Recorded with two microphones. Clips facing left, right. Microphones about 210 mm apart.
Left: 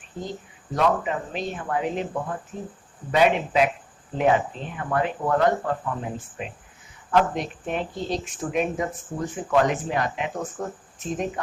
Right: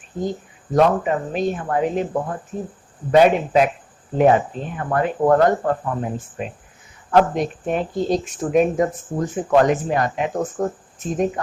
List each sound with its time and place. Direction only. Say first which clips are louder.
0.2 s speech: right 8 dB; 45° right (ahead or behind)